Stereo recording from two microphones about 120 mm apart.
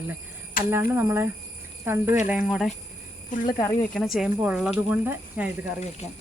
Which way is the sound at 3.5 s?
30° left (ahead or behind).